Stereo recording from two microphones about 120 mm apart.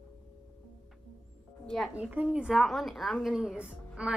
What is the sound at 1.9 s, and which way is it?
A woman's voice, 10° right (ahead or behind).